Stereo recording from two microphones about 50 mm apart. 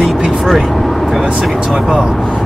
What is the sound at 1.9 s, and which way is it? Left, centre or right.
Speech, centre.